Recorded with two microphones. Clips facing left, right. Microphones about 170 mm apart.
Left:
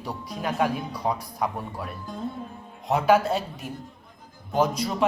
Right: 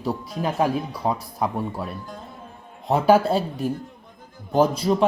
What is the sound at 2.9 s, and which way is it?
Speech, 30° right (ahead or behind).